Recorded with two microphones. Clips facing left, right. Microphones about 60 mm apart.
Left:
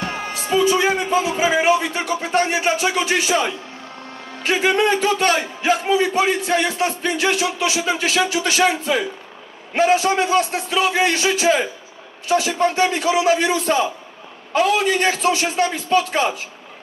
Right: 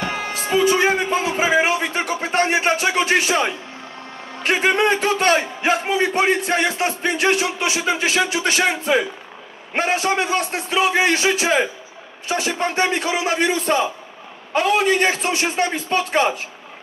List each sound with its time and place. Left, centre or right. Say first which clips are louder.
0.0 s a man's voice: right 1 dB; right